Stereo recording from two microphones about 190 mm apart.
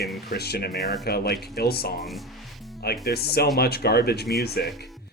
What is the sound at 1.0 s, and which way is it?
Speech, 55° left (ahead or behind).